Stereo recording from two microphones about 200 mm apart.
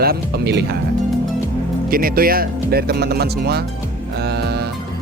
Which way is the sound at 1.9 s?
45° right (ahead or behind).